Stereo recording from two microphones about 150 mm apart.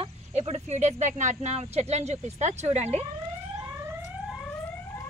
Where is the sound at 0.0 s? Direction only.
45° right (ahead or behind).